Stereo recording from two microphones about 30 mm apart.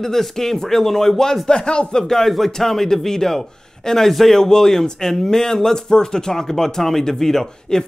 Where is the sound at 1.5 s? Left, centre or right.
Left.